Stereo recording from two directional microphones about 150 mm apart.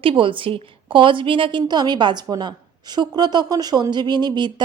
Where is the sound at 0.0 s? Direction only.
35° right (ahead or behind).